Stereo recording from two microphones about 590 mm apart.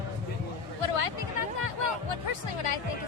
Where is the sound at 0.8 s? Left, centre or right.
Left.